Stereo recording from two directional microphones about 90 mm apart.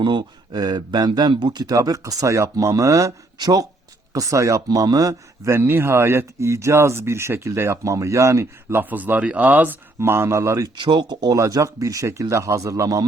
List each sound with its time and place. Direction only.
0.0 s speech: 60° right (ahead or behind); by 5.1 s 40° right (ahead or behind)
5.5 s speech: 25° right (ahead or behind)
8.8 s speech: 20° right (ahead or behind)
10.0 s speech: 30° right (ahead or behind)
10.8 s speech: 55° right (ahead or behind)
11.3 s speech: 35° right (ahead or behind)